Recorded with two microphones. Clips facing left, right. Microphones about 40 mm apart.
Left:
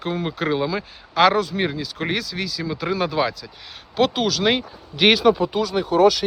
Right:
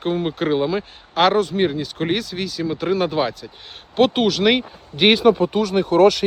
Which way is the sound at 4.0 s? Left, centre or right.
Right.